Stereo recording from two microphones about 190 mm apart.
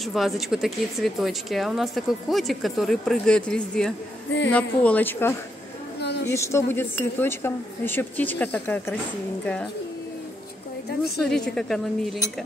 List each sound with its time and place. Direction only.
0.0 s speech: centre (ahead or behind)
5.9 s a sound: 60° left (ahead or behind)
6.3 s speech: 15° left (ahead or behind)
11.1 s speech: 5° left (ahead or behind)